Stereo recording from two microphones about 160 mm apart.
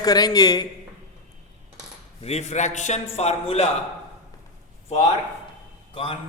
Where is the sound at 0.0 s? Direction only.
25° left (ahead or behind).